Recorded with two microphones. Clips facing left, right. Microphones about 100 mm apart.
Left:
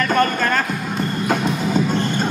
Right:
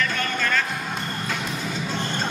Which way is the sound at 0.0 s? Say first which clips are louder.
Left 8 dB; 45° left (ahead or behind).